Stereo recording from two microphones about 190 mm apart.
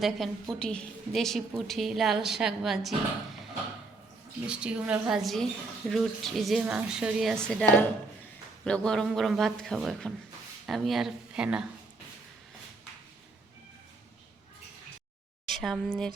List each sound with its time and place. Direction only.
0.0 s a woman's voice: centre (ahead or behind)
4.4 s a woman's voice: 5° right (ahead or behind)
15.4 s speech: centre (ahead or behind)